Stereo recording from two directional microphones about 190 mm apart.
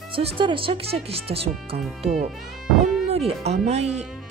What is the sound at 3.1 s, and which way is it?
Speech, 35° right (ahead or behind).